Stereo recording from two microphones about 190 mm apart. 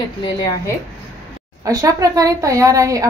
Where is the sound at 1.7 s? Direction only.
15° right (ahead or behind).